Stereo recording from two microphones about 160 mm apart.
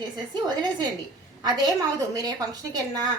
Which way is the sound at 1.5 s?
25° right (ahead or behind).